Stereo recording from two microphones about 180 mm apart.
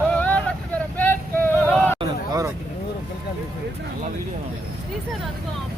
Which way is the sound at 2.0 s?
20° right (ahead or behind).